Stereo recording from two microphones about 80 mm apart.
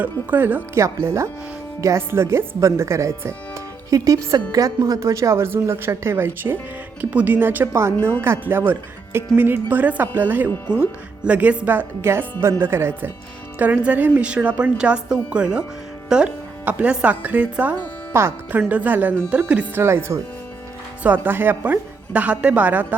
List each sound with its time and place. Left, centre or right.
0.0 s speech: right
0.8 s speech: right
12.4 s a woman's voice: right
18.1 s speech: right
18.7 s speech: right
19.8 s speech: right
21.0 s speech: right